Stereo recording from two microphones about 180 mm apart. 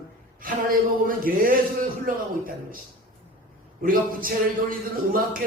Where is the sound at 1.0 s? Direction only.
50° right (ahead or behind).